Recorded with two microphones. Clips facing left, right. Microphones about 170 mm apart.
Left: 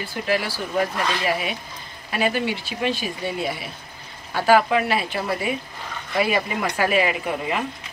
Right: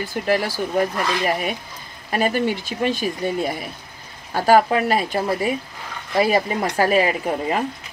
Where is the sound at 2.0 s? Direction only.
45° right (ahead or behind).